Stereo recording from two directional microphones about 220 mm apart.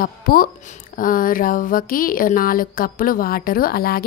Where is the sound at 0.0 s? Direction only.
40° left (ahead or behind).